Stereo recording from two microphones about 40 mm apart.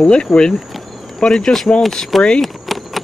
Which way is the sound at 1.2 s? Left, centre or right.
Centre.